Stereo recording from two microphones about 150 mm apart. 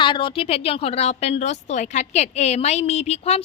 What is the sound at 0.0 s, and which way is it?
A woman's voice, 35° left (ahead or behind).